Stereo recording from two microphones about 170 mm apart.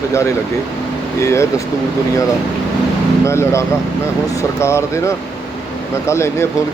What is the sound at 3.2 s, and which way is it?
Speech, 15° left (ahead or behind).